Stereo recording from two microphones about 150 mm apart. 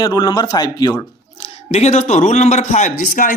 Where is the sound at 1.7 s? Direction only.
45° left (ahead or behind).